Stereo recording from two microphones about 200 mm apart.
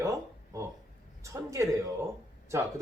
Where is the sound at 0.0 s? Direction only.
15° right (ahead or behind).